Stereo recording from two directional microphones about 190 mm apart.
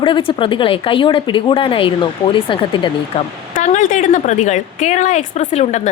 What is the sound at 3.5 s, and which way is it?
A woman's voice, 40° left (ahead or behind).